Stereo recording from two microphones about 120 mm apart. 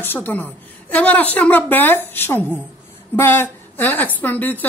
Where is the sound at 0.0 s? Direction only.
15° left (ahead or behind).